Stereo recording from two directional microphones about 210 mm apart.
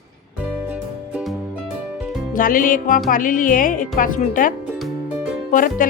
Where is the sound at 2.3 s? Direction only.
40° left (ahead or behind).